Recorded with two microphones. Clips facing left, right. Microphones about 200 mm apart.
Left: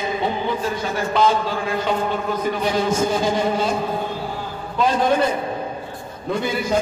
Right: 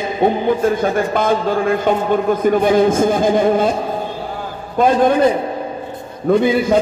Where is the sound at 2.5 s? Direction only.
50° right (ahead or behind).